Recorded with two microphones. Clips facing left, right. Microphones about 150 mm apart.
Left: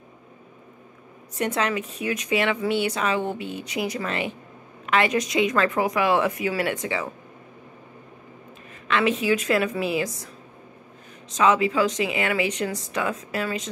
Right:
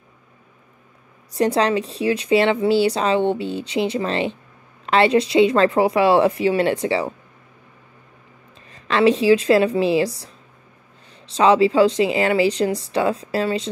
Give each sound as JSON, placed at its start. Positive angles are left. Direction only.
{"t": 1.3, "sound": "a woman's voice", "side_deg": -35}
{"t": 8.8, "sound": "a woman's voice", "side_deg": -35}
{"t": 11.3, "sound": "a woman's voice", "side_deg": -30}